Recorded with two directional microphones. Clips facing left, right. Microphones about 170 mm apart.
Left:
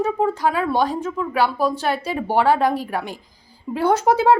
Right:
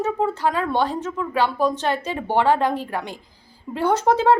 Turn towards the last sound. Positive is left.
turn(degrees=10)  # may be behind; listen again after turning